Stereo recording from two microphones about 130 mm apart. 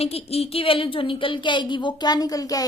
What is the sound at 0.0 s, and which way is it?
A woman's voice, 50° left (ahead or behind).